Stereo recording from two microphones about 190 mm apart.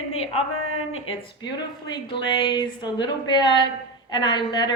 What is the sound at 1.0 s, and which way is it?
A woman's voice, 25° left (ahead or behind).